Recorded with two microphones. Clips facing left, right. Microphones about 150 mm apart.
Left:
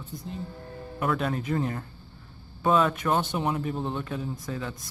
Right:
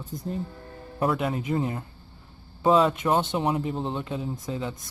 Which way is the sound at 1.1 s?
15° right (ahead or behind).